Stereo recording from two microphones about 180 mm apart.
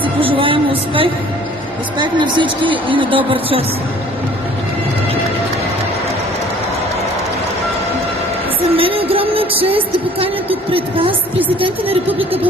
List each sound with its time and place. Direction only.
0.0 s a sound: 30° right (ahead or behind)
2.0 s a woman's voice: 25° right (ahead or behind)
8.7 s music: 30° right (ahead or behind)